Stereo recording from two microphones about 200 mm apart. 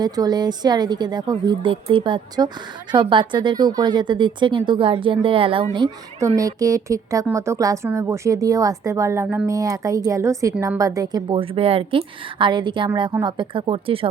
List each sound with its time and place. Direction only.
0.0 s speech: 20° right (ahead or behind)